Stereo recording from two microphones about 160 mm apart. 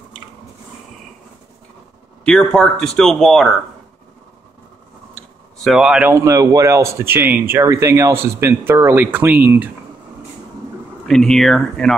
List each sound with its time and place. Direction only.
2.2 s speech: 5° left (ahead or behind)
5.1 s a sound: centre (ahead or behind)
6.1 s a man's voice: 20° right (ahead or behind)
11.1 s speech: 5° left (ahead or behind)